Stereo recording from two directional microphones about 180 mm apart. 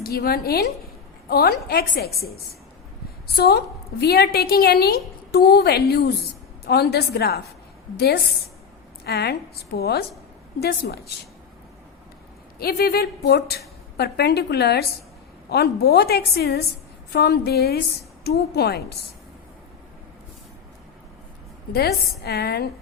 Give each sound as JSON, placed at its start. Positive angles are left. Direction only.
{"t": 0.0, "sound": "a woman's voice", "side_deg": 55}
{"t": 3.2, "sound": "a woman's voice", "side_deg": 60}
{"t": 12.5, "sound": "a woman's voice", "side_deg": 60}
{"t": 21.7, "sound": "a woman's voice", "side_deg": 60}